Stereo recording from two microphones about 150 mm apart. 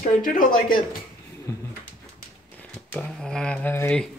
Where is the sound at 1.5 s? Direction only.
20° left (ahead or behind).